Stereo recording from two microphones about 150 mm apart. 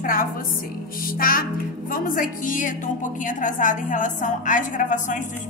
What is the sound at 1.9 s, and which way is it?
A woman's voice, 65° left (ahead or behind).